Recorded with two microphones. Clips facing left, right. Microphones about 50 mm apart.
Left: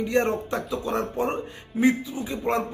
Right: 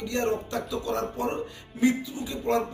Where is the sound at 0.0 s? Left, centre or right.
Left.